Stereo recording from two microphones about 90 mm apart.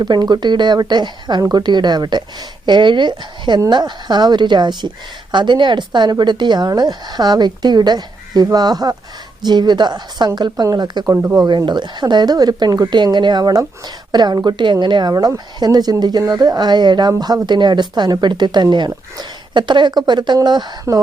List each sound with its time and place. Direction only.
0.0 s speech: 50° right (ahead or behind)
11.1 s speech: 30° right (ahead or behind)
11.4 s speech: 55° right (ahead or behind)
15.5 s speech: 50° right (ahead or behind)